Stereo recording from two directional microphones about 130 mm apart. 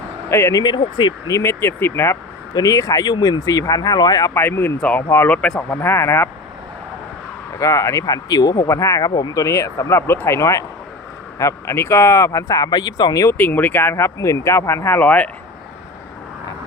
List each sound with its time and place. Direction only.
0.3 s speech: 20° left (ahead or behind)
1.4 s speech: 20° left (ahead or behind)
4.4 s speech: 15° left (ahead or behind)
7.6 s speech: 25° left (ahead or behind)
13.3 s speech: 15° left (ahead or behind)